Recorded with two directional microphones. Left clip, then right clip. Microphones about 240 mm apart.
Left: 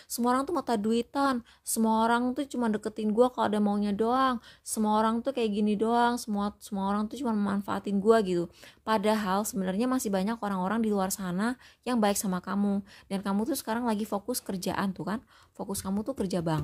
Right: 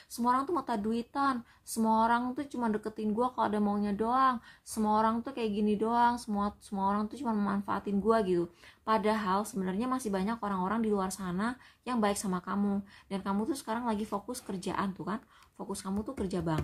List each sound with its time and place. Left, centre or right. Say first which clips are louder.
0.1 s speech: left 2 dB; left